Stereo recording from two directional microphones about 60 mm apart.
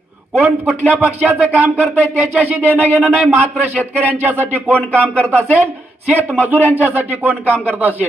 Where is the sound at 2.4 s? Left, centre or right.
Right.